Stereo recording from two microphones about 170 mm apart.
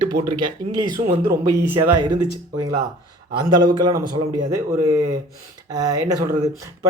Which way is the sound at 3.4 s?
25° right (ahead or behind).